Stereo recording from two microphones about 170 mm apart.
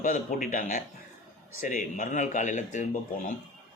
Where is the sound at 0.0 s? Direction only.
50° left (ahead or behind).